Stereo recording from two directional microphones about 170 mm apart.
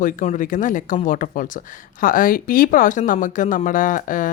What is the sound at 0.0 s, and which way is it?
A woman's voice, 50° left (ahead or behind).